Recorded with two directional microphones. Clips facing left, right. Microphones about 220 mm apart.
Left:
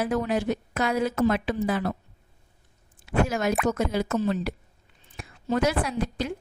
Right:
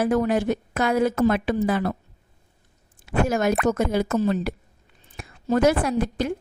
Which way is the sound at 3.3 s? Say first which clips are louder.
Right 4 dB; 45° right (ahead or behind).